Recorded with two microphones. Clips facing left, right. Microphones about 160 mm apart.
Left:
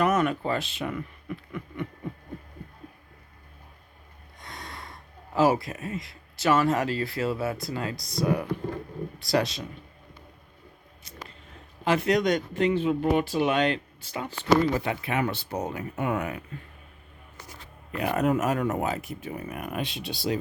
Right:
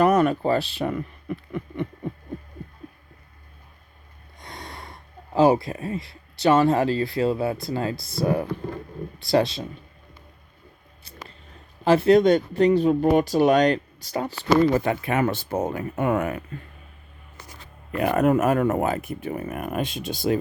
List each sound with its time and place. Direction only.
0.0 s speech: 35° right (ahead or behind)
4.4 s speech: 25° right (ahead or behind)
7.9 s speech: centre (ahead or behind)
8.2 s speech: 30° right (ahead or behind)
11.9 s speech: 30° right (ahead or behind); by 16.4 s 50° right (ahead or behind)
17.9 s speech: 55° right (ahead or behind)